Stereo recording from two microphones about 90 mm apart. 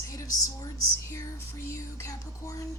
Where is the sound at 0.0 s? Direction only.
40° left (ahead or behind).